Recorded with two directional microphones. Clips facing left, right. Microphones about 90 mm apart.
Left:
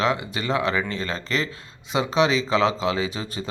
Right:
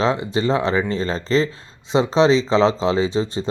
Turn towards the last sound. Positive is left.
turn(degrees=-30)  # may be behind; listen again after turning